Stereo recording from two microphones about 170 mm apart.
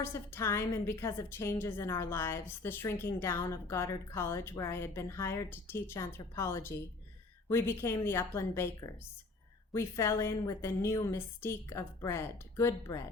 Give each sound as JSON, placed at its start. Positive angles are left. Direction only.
{"t": 0.0, "sound": "a woman's voice", "side_deg": 15}